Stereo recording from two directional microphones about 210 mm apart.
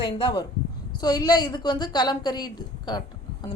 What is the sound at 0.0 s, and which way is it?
A woman's voice, 20° left (ahead or behind).